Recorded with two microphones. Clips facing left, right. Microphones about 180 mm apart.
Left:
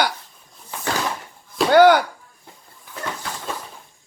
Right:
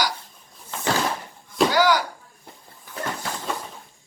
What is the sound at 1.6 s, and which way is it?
Speech, 55° left (ahead or behind).